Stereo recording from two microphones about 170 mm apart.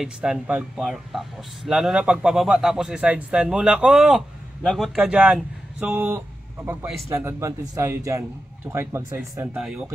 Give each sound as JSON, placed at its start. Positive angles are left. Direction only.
{"t": 0.0, "sound": "speech", "side_deg": -5}
{"t": 9.6, "sound": "speech", "side_deg": 0}